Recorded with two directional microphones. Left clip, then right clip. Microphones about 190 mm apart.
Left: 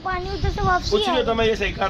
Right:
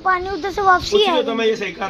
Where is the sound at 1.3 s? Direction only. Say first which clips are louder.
Right 1 dB; 20° left (ahead or behind).